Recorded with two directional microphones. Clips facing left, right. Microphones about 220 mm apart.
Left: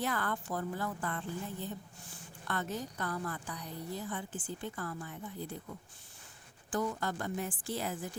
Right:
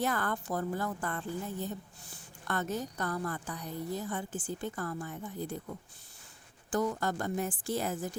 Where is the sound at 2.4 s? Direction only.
45° right (ahead or behind).